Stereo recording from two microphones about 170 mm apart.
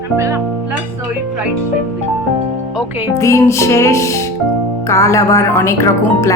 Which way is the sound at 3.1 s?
15° left (ahead or behind).